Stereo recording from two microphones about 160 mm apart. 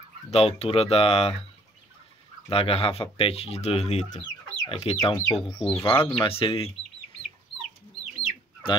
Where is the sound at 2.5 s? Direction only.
35° left (ahead or behind).